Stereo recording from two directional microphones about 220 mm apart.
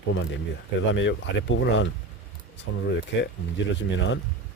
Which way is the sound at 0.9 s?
55° left (ahead or behind).